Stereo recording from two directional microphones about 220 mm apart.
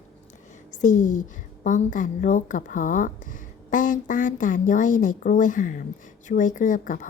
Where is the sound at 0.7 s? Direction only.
35° left (ahead or behind).